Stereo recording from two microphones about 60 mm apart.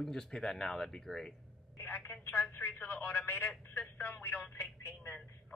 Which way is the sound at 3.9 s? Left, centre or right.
Left.